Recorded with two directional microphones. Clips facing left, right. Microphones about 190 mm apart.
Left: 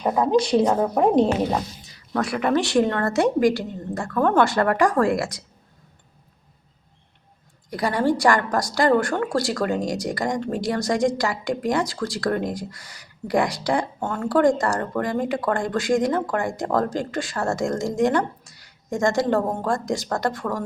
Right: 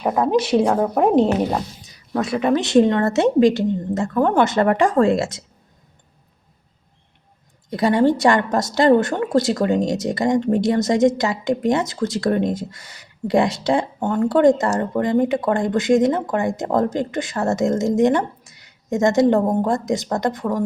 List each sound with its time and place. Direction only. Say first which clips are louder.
0.3 s a woman's voice: right 1 dB; 5° right (ahead or behind)
2.1 s a woman's voice: right 3 dB; 20° right (ahead or behind)
7.7 s a woman's voice: right 5 dB; 25° right (ahead or behind)